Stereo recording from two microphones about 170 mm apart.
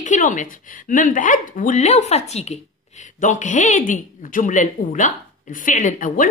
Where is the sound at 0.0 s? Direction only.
50° left (ahead or behind).